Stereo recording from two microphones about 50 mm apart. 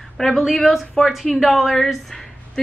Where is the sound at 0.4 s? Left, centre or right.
Centre.